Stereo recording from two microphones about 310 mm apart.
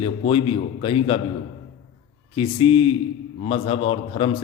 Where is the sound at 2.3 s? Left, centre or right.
Centre.